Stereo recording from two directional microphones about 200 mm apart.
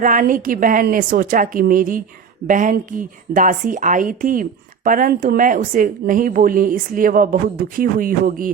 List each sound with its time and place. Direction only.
0.0 s a woman's voice: 40° right (ahead or behind)